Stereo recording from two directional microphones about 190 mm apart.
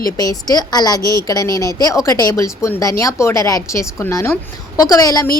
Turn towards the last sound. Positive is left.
turn(degrees=20)  # may be behind; listen again after turning